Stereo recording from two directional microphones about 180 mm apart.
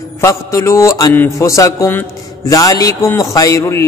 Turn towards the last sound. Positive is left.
turn(degrees=15)  # may be behind; listen again after turning